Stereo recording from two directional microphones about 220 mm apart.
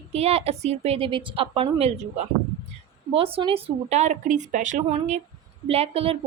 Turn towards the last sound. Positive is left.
turn(degrees=-25)  # may be behind; listen again after turning